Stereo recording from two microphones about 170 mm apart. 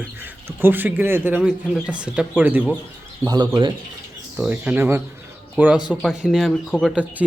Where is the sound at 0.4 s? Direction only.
10° right (ahead or behind).